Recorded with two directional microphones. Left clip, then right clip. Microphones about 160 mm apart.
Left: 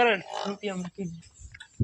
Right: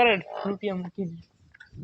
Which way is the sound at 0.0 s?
20° right (ahead or behind).